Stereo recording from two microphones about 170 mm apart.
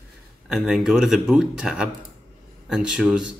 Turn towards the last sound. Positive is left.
turn(degrees=-5)  # may be behind; listen again after turning